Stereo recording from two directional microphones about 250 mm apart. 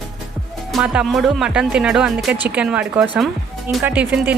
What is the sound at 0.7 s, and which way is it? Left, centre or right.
Speech, centre.